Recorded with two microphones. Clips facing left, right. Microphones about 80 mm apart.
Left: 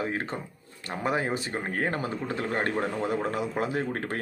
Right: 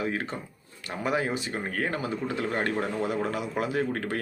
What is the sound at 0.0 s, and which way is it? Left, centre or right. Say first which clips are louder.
Speech: even; left.